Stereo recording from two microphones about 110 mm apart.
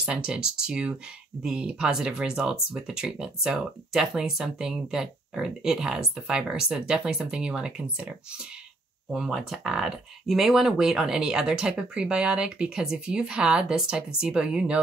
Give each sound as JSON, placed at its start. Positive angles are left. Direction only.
{"t": 0.0, "sound": "speech", "side_deg": -10}
{"t": 9.1, "sound": "speech", "side_deg": -5}